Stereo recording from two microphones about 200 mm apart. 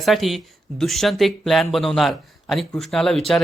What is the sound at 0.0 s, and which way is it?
Speech, centre (ahead or behind).